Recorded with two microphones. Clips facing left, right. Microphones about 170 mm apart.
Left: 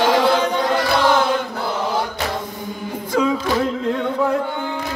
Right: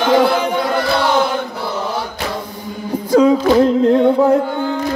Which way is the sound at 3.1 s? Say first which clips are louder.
Right 8 dB; 35° right (ahead or behind).